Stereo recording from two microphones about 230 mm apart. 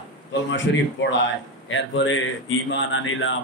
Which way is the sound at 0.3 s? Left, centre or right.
Left.